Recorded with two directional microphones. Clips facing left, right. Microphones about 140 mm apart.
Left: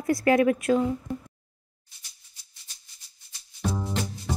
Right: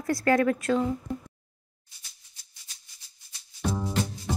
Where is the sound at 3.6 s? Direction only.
Centre (ahead or behind).